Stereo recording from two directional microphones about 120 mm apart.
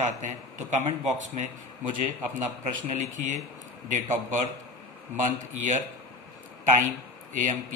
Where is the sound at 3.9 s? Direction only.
90° right.